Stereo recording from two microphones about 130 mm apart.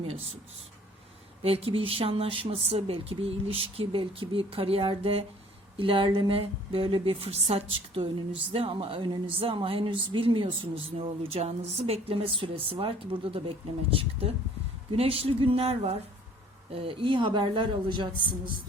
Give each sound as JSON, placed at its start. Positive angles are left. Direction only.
{"t": 0.0, "sound": "a woman's voice", "side_deg": -50}
{"t": 1.4, "sound": "a woman's voice", "side_deg": -50}